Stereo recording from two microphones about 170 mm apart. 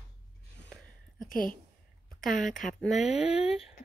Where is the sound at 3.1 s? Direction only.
35° left (ahead or behind).